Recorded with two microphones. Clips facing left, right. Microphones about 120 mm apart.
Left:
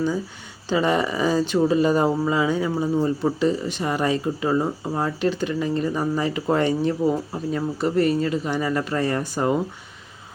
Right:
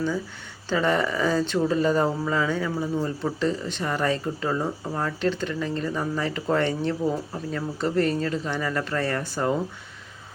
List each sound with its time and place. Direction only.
0.7 s speech: 15° left (ahead or behind)